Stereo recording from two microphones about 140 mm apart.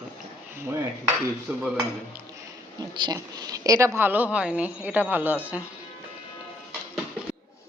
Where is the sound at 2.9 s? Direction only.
30° right (ahead or behind); by 5.6 s 10° right (ahead or behind).